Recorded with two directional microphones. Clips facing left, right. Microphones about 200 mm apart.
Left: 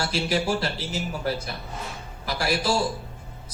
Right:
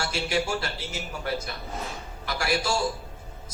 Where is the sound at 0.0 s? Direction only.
35° left (ahead or behind).